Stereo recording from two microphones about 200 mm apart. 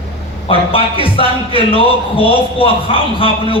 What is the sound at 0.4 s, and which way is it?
A man's voice, 25° left (ahead or behind).